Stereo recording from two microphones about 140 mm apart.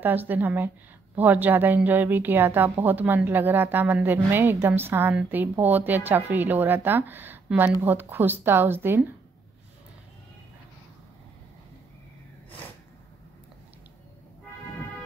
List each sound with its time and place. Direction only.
0.0 s a woman's voice: 15° right (ahead or behind)